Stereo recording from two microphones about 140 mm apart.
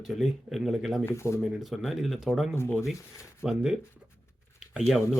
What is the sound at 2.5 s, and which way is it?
Speech, 15° left (ahead or behind).